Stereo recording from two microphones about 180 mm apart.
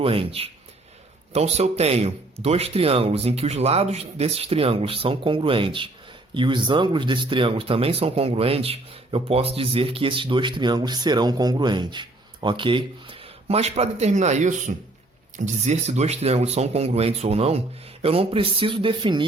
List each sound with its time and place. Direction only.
0.0 s speech: 30° right (ahead or behind)